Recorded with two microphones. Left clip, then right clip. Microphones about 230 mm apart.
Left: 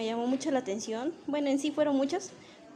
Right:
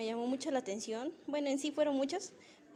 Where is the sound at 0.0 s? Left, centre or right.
Centre.